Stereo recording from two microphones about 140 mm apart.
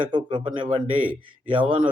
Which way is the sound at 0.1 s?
35° right (ahead or behind).